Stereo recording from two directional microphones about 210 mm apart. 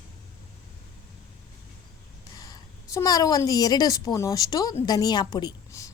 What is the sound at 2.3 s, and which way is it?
A woman's voice, 15° left (ahead or behind).